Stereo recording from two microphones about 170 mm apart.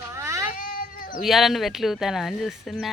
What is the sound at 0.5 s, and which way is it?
Cat, 55° left (ahead or behind).